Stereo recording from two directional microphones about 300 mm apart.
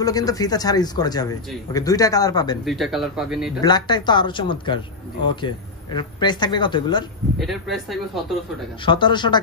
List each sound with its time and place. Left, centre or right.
0.0 s a man's voice: centre
2.6 s speech: centre
3.6 s a man's voice: centre
7.3 s speech: centre
8.8 s a man's voice: centre